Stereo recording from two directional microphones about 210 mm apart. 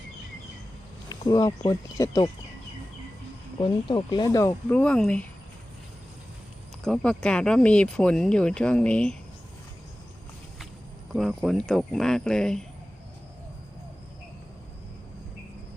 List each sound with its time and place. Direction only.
1.1 s speech: 20° left (ahead or behind)
3.6 s speech: 20° left (ahead or behind); by 5.2 s 5° left (ahead or behind)
6.8 s speech: 5° left (ahead or behind)
11.1 s speech: centre (ahead or behind)